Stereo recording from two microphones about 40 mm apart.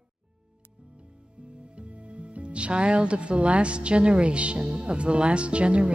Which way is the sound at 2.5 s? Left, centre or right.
Right.